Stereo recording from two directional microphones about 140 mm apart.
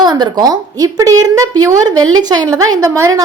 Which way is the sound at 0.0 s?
30° right (ahead or behind).